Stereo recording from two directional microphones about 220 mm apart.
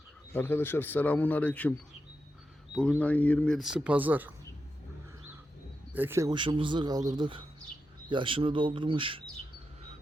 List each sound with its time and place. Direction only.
0.3 s speech: 10° left (ahead or behind)
2.7 s speech: 5° left (ahead or behind)
5.9 s speech: 10° right (ahead or behind)